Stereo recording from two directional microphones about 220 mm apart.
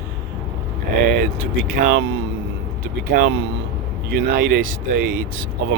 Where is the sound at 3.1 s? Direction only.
45° right (ahead or behind).